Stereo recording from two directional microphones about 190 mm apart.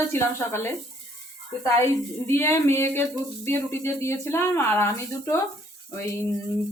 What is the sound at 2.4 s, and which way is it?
Speech, 15° left (ahead or behind).